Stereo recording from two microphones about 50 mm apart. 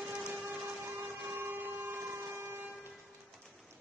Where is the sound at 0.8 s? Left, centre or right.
Centre.